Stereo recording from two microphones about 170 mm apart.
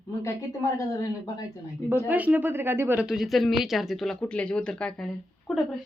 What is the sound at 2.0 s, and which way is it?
Speech, 10° right (ahead or behind).